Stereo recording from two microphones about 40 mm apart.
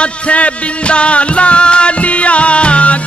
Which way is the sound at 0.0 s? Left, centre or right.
Left.